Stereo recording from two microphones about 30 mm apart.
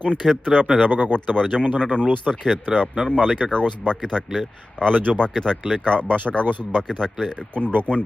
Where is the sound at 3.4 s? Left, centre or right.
Left.